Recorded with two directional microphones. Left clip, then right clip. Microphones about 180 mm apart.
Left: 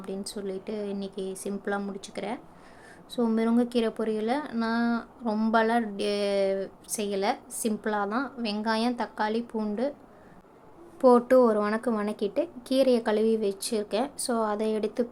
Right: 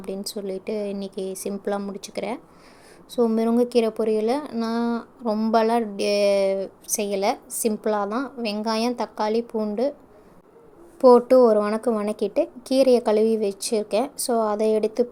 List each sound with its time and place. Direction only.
0.0 s a woman's voice: 15° right (ahead or behind)
11.0 s a woman's voice: 10° right (ahead or behind)